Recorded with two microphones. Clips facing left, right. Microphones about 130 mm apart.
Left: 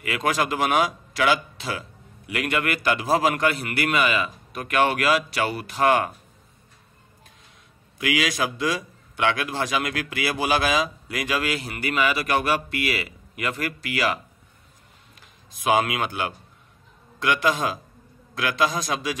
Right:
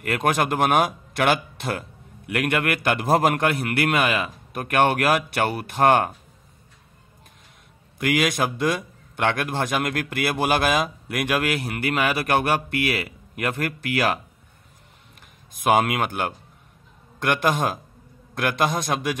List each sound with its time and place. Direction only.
0.0 s a man's voice: 55° right (ahead or behind)
8.0 s a man's voice: 50° right (ahead or behind)
15.5 s a man's voice: 50° right (ahead or behind)